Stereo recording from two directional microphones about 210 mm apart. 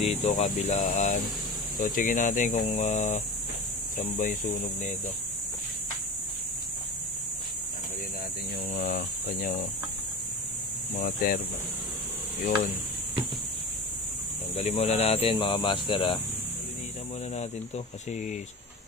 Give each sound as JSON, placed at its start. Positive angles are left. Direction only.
{"t": 0.0, "sound": "speech", "side_deg": 30}
{"t": 8.7, "sound": "speech", "side_deg": 45}
{"t": 11.0, "sound": "speech", "side_deg": 45}
{"t": 14.7, "sound": "speech", "side_deg": 30}
{"t": 17.4, "sound": "speech", "side_deg": 35}